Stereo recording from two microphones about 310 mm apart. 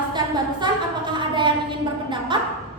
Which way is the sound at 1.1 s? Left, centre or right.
Centre.